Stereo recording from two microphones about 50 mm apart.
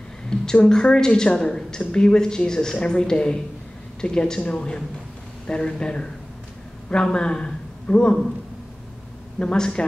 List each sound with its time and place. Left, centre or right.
0.3 s a woman's voice: centre
9.4 s speech: centre